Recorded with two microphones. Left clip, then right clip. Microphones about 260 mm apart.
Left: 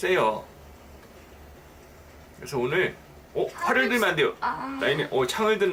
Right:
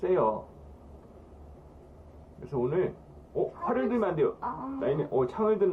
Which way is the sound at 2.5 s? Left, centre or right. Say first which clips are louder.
Left 4 dB; centre.